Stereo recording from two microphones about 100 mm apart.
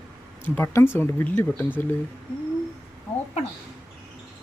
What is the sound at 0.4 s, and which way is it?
Speech, 20° left (ahead or behind).